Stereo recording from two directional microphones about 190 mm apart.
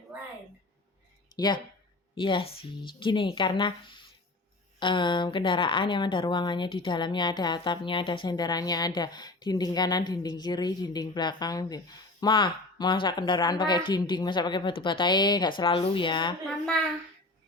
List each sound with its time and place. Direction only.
1.4 s a woman's voice: 20° left (ahead or behind)